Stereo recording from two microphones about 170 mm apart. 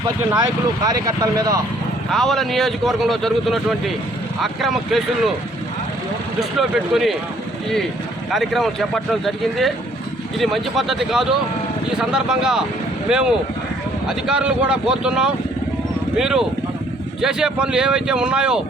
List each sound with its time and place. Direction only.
0.9 s speech: 20° right (ahead or behind)
2.0 s speech: centre (ahead or behind)
6.6 s speech: centre (ahead or behind)
8.3 s speech: centre (ahead or behind)